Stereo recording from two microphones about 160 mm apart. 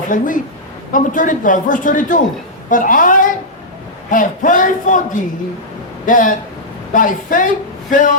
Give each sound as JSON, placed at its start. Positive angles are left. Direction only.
{"t": 0.1, "sound": "speech", "side_deg": 55}
{"t": 6.1, "sound": "speech", "side_deg": 55}